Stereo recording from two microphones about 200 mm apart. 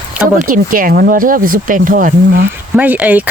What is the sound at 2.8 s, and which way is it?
Speech, 10° right (ahead or behind).